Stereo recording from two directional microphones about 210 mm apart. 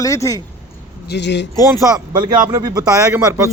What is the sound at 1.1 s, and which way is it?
Speech, 55° left (ahead or behind).